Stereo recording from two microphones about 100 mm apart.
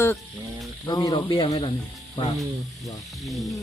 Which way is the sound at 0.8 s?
40° left (ahead or behind).